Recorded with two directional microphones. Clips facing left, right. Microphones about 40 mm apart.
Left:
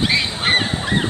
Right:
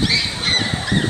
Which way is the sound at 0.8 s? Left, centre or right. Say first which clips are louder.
Even; left.